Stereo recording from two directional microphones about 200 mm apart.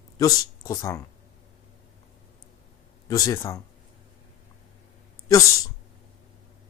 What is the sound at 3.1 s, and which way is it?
Speech, 15° left (ahead or behind).